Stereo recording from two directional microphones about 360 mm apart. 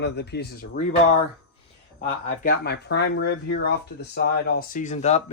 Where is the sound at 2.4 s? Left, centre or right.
Left.